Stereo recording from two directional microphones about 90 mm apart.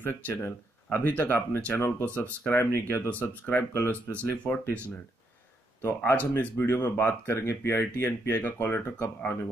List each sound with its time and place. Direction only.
0.0 s speech: 25° left (ahead or behind)
2.5 s speech: 30° left (ahead or behind)
3.1 s speech: 15° left (ahead or behind)
6.0 s speech: 25° left (ahead or behind)